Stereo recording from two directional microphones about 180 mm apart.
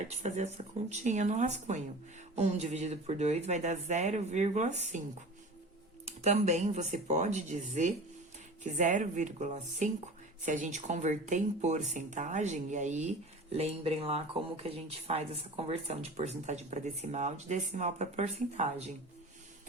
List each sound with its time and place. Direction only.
0.1 s speech: 40° right (ahead or behind)
6.2 s speech: 40° right (ahead or behind)